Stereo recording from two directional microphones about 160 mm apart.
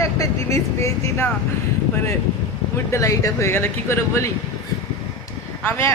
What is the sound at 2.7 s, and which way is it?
Speech, 20° left (ahead or behind).